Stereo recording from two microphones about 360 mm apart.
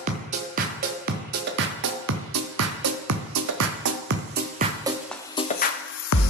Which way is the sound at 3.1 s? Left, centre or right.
Right.